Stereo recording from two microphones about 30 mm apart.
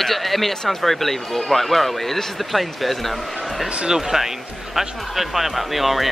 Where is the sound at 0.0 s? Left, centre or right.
Centre.